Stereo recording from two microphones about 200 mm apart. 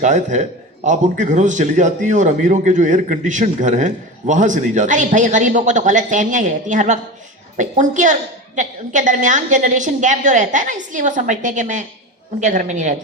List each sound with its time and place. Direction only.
0.0 s a man's voice: 35° right (ahead or behind)